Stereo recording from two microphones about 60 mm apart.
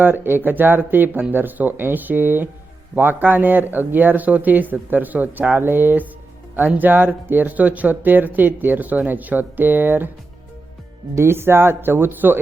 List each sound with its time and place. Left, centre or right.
0.0 s speech: right
11.1 s speech: right